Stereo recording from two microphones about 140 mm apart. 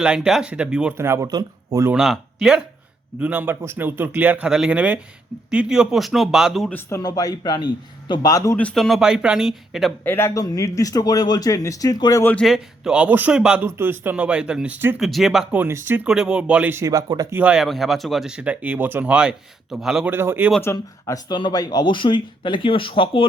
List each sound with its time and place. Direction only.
0.0 s speech: 5° right (ahead or behind)
0.9 s speech: 20° right (ahead or behind)
2.0 s speech: 5° right (ahead or behind)
6.9 s speech: 25° left (ahead or behind)
8.5 s speech: 5° left (ahead or behind)
10.0 s speech: 15° left (ahead or behind)
12.2 s a man's voice: 10° left (ahead or behind)
12.5 s speech: 5° right (ahead or behind)
15.0 s speech: centre (ahead or behind)
15.6 s speech: 15° right (ahead or behind)
17.3 s speech: 10° right (ahead or behind)
20.1 s speech: 15° right (ahead or behind)
20.6 s speech: 20° left (ahead or behind); by 23.2 s 40° left (ahead or behind)